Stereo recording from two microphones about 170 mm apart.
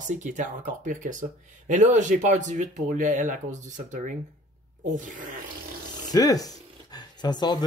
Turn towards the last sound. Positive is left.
turn(degrees=25)  # may be behind; listen again after turning